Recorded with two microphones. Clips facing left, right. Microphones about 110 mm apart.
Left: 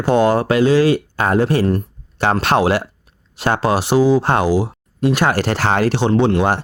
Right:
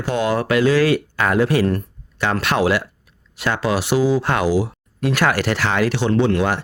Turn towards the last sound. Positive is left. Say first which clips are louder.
# left 2 dB
turn(degrees=30)  # may be behind; listen again after turning